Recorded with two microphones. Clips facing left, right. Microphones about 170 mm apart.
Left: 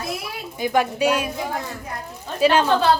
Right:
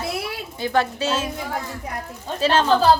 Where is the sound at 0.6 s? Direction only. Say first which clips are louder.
Left 2 dB; 15° left (ahead or behind).